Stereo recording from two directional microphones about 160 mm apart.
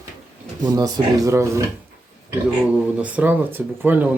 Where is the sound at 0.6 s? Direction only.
20° right (ahead or behind).